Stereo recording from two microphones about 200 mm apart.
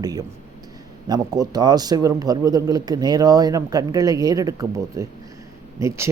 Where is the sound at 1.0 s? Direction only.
20° right (ahead or behind).